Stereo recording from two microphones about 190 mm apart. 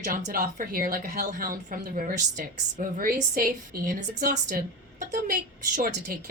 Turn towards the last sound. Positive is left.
turn(degrees=-50)  # may be behind; listen again after turning